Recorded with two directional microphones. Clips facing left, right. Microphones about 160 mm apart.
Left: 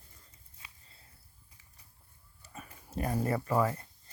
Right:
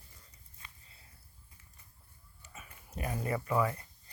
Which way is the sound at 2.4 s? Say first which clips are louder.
Left 4 dB; 35° left (ahead or behind).